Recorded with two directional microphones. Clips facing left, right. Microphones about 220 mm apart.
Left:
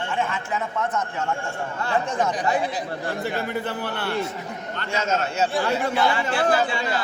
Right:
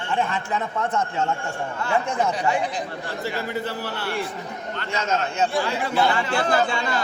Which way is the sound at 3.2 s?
55° left (ahead or behind).